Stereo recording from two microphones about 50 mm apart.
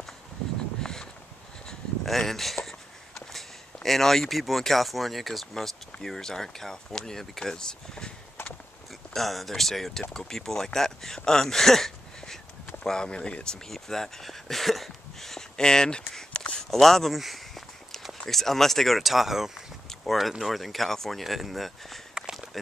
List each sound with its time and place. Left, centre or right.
0.7 s a sound: centre
3.2 s speech: centre
9.1 s speech: centre
22.3 s walk: centre